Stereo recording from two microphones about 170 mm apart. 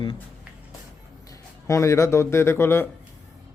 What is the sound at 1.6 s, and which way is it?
A man's voice, 15° left (ahead or behind).